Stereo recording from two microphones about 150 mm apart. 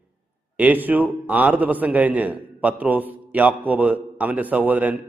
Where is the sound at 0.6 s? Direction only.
10° right (ahead or behind).